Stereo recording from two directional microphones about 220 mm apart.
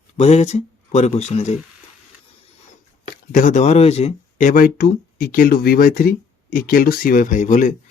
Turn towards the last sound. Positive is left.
turn(degrees=35)  # may be behind; listen again after turning